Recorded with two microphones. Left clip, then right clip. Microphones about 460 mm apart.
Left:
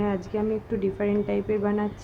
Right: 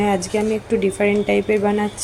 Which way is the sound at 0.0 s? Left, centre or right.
Left.